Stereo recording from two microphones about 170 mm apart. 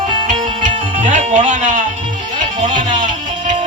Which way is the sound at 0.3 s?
45° right (ahead or behind).